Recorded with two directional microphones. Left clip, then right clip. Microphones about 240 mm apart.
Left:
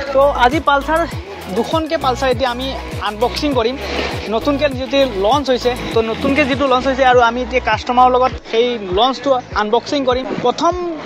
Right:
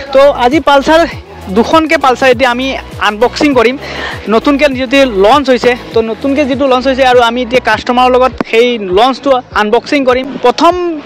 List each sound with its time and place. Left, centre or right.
0.2 s speech: right